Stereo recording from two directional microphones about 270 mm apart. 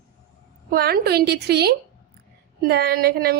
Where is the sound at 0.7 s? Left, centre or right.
Right.